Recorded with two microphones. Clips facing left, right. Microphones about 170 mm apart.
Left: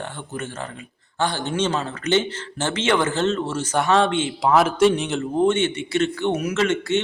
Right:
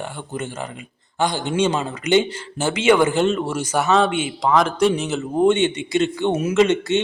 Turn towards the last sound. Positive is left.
turn(degrees=-20)  # may be behind; listen again after turning